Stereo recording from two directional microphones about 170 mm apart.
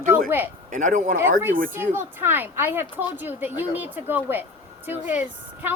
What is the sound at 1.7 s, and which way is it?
A woman's voice, 15° right (ahead or behind).